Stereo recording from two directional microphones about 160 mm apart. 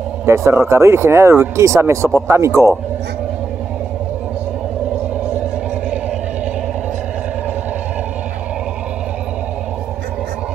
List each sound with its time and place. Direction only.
0.2 s speech: 15° right (ahead or behind)